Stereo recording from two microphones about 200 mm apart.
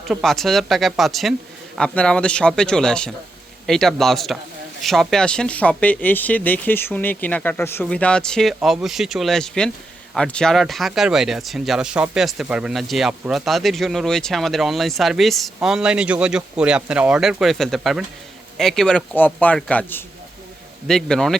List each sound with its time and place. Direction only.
0.1 s speech: centre (ahead or behind)